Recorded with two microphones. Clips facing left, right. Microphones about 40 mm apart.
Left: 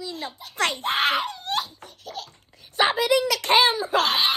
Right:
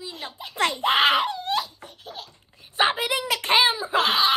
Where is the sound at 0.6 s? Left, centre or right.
Left.